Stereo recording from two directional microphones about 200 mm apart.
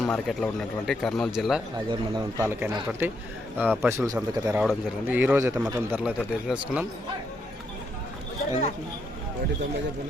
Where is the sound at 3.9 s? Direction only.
15° right (ahead or behind).